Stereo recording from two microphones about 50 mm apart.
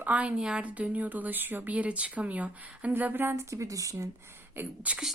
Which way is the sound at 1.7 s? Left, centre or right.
Right.